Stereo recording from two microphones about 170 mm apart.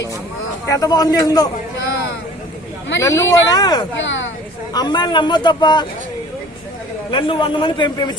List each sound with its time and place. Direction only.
0.7 s a man's voice: 20° left (ahead or behind)
3.0 s a man's voice: 20° left (ahead or behind)
3.9 s speech: 90° left
4.7 s a man's voice: 25° left (ahead or behind)
7.1 s a man's voice: 30° left (ahead or behind)